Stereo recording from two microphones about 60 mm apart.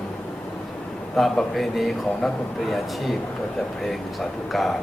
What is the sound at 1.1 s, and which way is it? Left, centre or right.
A man's voice, centre.